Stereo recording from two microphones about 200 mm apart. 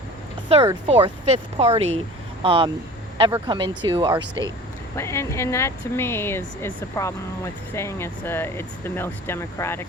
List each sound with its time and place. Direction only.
0.4 s speech: 30° right (ahead or behind)
4.9 s speech: 15° left (ahead or behind)